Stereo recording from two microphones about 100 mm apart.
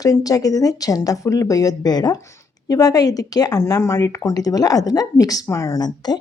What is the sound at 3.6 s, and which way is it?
A woman's voice, 30° left (ahead or behind).